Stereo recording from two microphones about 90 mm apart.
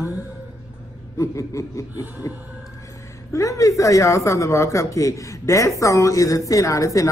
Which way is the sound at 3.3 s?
40° left (ahead or behind).